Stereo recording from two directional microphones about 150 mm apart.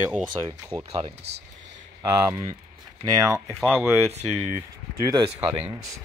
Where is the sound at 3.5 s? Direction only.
Centre (ahead or behind).